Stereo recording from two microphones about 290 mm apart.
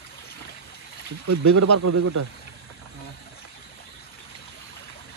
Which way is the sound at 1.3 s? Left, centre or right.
Right.